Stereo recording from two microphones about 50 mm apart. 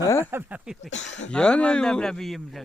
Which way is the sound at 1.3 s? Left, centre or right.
Centre.